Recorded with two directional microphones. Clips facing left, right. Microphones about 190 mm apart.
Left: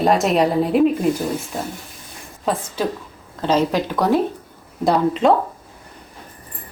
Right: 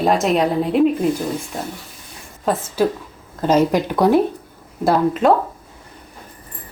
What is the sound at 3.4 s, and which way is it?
A woman's voice, 10° right (ahead or behind).